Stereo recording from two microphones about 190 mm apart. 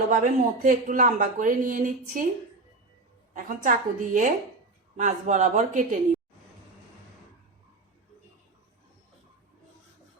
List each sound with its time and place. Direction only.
0.1 s speech: 45° right (ahead or behind)
3.3 s speech: 45° right (ahead or behind)